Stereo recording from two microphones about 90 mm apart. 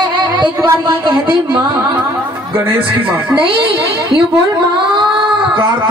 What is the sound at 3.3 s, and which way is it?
Speech, 80° right.